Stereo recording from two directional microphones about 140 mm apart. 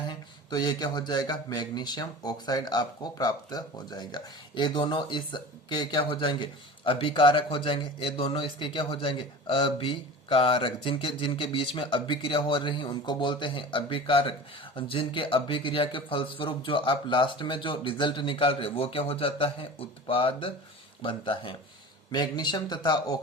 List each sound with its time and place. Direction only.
0.1 s speech: 30° left (ahead or behind)